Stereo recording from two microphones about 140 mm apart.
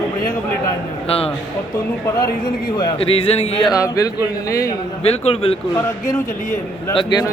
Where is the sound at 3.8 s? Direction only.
25° left (ahead or behind).